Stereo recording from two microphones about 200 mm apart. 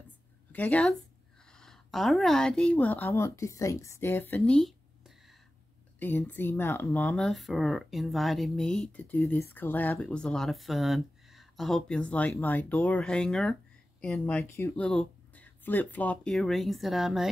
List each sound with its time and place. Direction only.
0.5 s speech: 5° left (ahead or behind)